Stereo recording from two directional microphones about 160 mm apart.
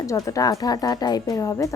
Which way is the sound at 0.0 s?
20° left (ahead or behind).